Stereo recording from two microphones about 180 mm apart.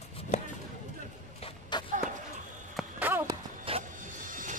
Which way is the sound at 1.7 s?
25° left (ahead or behind).